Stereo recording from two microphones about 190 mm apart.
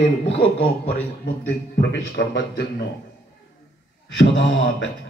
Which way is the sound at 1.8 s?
65° left (ahead or behind).